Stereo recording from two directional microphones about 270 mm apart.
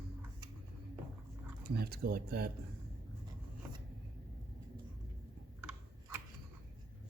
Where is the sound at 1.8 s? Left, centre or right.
Right.